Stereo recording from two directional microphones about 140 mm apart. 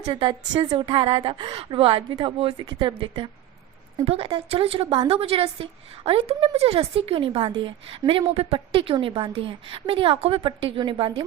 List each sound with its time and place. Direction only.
0.0 s a woman's voice: 35° right (ahead or behind)